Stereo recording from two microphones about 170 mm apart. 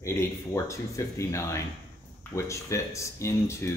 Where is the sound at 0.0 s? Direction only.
15° left (ahead or behind).